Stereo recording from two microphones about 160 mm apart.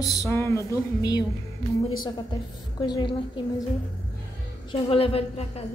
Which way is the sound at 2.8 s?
30° left (ahead or behind).